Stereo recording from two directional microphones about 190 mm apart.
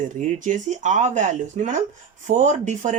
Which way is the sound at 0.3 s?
40° right (ahead or behind).